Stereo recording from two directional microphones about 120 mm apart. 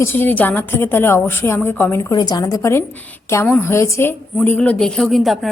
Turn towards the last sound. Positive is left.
turn(degrees=0)  # may be behind; listen again after turning